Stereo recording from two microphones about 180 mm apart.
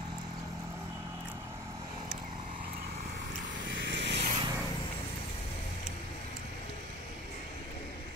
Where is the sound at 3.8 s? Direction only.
80° right.